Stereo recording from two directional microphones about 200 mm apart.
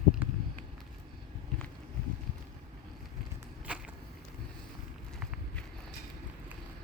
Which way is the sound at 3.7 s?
5° right (ahead or behind).